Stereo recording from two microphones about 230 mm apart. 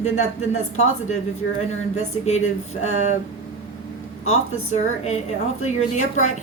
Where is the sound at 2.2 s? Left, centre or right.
Left.